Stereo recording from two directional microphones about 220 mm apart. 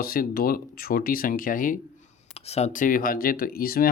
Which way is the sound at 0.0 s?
40° left (ahead or behind).